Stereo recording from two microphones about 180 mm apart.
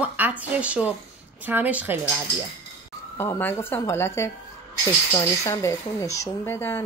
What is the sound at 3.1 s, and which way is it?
Speech, 15° left (ahead or behind).